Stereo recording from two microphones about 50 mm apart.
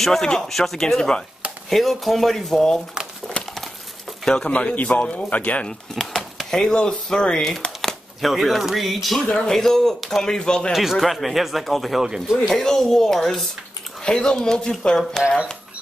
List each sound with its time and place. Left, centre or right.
0.0 s speech: centre
1.7 s speech: centre
4.3 s speech: left
5.9 s speech: centre
8.2 s speech: centre
10.7 s speech: centre
12.0 s speech: centre
12.4 s speech: centre